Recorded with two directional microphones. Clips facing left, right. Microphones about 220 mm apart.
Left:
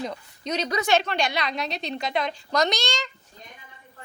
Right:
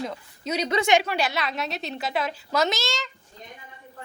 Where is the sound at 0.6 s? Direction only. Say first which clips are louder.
Right 2 dB; 20° right (ahead or behind).